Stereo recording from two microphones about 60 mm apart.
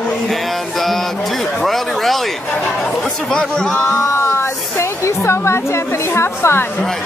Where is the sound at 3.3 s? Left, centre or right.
Centre.